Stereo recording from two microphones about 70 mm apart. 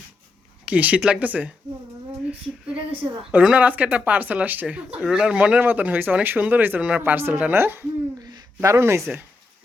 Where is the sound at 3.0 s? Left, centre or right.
Right.